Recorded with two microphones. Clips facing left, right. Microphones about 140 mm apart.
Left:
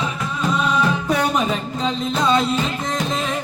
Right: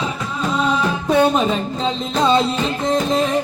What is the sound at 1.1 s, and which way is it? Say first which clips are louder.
Music: right 8 dB; 30° right (ahead or behind).